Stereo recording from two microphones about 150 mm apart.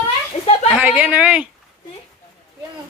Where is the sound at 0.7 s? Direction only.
10° right (ahead or behind).